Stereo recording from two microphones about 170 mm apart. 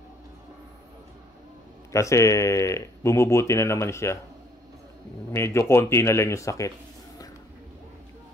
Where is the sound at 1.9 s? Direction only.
20° left (ahead or behind).